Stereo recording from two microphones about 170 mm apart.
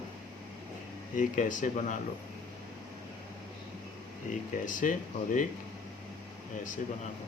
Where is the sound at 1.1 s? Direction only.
50° left (ahead or behind).